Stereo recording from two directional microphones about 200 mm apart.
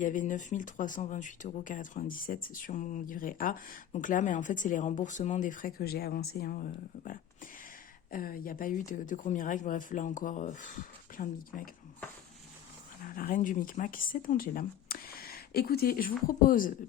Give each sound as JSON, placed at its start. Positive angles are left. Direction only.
{"t": 0.0, "sound": "speech", "side_deg": 40}
{"t": 13.0, "sound": "speech", "side_deg": 45}